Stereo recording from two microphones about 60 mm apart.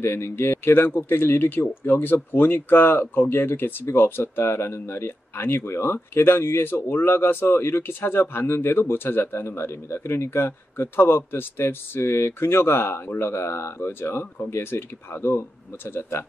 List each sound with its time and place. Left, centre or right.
0.0 s speech: left